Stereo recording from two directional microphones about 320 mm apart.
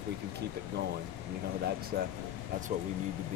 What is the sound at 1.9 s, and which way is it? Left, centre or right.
Speech, right.